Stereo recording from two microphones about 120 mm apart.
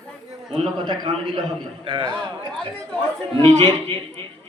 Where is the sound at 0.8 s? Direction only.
45° right (ahead or behind).